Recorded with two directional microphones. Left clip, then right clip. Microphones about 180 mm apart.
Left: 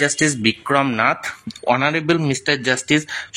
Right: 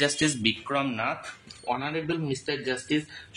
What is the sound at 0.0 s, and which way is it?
Speech, 30° left (ahead or behind).